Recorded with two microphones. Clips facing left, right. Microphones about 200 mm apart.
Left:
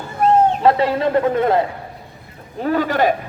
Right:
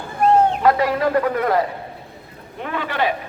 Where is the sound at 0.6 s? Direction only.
30° left (ahead or behind).